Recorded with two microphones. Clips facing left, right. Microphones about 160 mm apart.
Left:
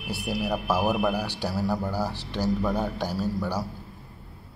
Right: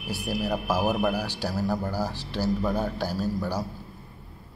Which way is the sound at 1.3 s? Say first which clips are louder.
Even; 15° left (ahead or behind).